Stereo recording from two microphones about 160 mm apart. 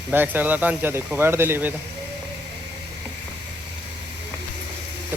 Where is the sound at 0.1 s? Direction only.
10° right (ahead or behind).